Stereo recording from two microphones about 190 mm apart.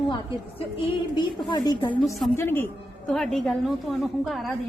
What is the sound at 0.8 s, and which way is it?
A woman's voice, 25° left (ahead or behind).